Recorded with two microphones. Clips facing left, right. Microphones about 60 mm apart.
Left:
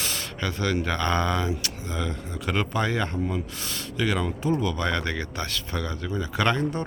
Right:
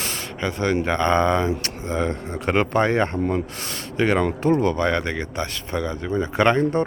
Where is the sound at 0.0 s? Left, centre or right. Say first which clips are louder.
Right 4 dB; right.